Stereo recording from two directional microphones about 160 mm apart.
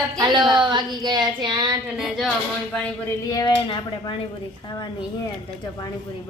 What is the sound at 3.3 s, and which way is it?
Speech, 25° left (ahead or behind).